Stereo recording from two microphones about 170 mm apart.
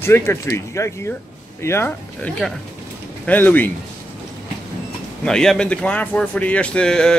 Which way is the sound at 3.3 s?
10° left (ahead or behind).